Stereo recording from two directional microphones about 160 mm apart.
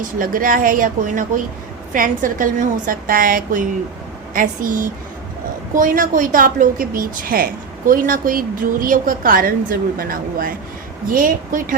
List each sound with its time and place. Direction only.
0.2 s a woman's voice: 60° right (ahead or behind)